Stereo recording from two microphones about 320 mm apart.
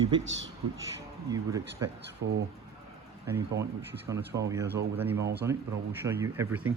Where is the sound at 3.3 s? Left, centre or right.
Centre.